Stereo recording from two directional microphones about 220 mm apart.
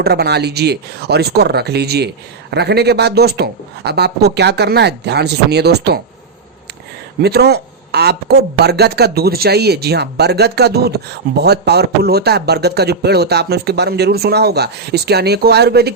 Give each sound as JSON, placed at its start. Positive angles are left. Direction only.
{"t": 0.0, "sound": "speech", "side_deg": -45}
{"t": 7.2, "sound": "speech", "side_deg": -45}